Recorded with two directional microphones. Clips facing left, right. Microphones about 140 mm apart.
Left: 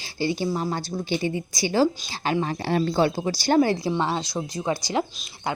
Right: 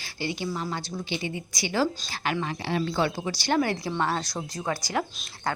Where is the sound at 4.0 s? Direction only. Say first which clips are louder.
Left 2 dB; 20° left (ahead or behind).